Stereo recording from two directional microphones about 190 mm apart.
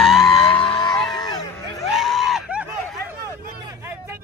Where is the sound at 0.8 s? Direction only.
5° left (ahead or behind).